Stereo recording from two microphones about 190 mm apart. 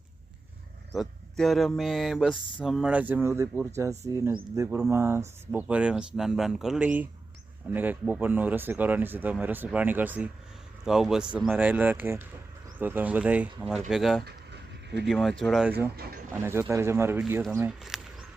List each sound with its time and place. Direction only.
0.9 s speech: centre (ahead or behind)
14.3 s a sound: 60° right (ahead or behind)
15.0 s speech: centre (ahead or behind)
16.0 s speech: 55° right (ahead or behind)
16.4 s speech: 15° right (ahead or behind)